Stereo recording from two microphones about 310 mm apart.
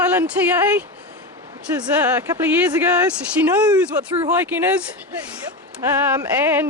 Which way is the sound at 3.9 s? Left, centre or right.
Centre.